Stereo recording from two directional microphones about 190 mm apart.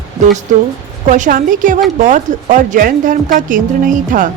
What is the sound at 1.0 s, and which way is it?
A woman's voice, 40° right (ahead or behind).